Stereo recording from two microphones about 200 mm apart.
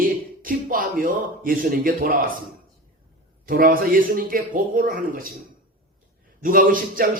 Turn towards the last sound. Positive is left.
turn(degrees=-45)  # may be behind; listen again after turning